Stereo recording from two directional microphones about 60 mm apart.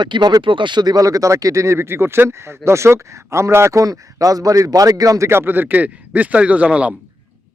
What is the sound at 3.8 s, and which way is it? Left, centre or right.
A man's voice, right.